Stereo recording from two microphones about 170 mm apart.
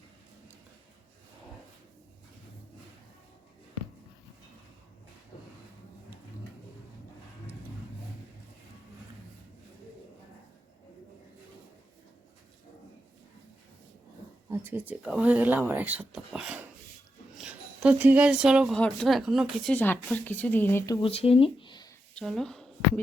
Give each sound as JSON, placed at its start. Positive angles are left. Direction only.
{"t": 14.5, "sound": "speech", "side_deg": -10}
{"t": 19.7, "sound": "speech", "side_deg": 10}
{"t": 21.0, "sound": "speech", "side_deg": 35}
{"t": 22.1, "sound": "a sound", "side_deg": 0}